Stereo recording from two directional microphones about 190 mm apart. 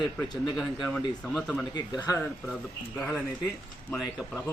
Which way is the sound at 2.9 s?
Centre (ahead or behind).